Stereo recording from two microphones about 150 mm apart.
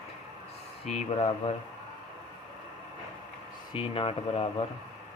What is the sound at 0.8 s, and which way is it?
Speech, 45° left (ahead or behind).